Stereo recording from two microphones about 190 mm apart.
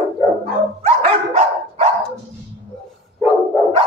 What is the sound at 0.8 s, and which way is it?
Dog, 30° right (ahead or behind).